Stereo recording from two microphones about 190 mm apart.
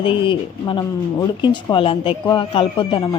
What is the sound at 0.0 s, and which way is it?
Speech, 25° left (ahead or behind).